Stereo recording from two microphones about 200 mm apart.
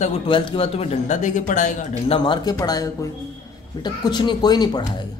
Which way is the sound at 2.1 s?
20° left (ahead or behind).